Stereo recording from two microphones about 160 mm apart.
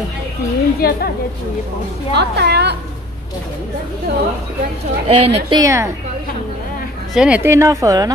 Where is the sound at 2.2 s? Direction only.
90° right.